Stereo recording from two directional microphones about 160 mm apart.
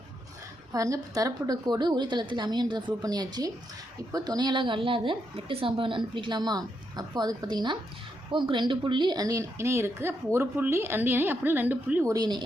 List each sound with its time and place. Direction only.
0.7 s a woman's voice: 20° right (ahead or behind)
12.1 s a woman's voice: 25° right (ahead or behind)